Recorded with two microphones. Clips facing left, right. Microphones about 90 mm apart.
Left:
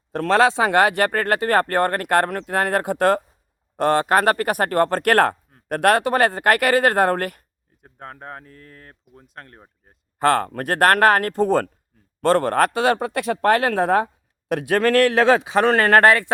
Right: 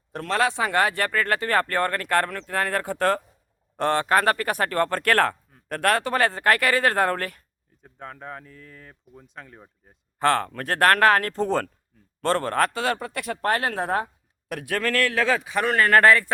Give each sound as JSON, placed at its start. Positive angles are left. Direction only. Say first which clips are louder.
{"t": 0.1, "sound": "speech", "louder": "left 8 dB", "side_deg": 40}
{"t": 0.4, "sound": "speech", "louder": "left 3 dB", "side_deg": 90}
{"t": 7.9, "sound": "speech", "louder": "left 1 dB", "side_deg": 10}
{"t": 10.2, "sound": "speech", "louder": "left 3 dB", "side_deg": 45}
{"t": 14.5, "sound": "a man's voice", "louder": "left 8 dB", "side_deg": 25}
{"t": 14.8, "sound": "speech", "louder": "left 7 dB", "side_deg": 65}
{"t": 15.7, "sound": "speech", "louder": "left 1 dB", "side_deg": 85}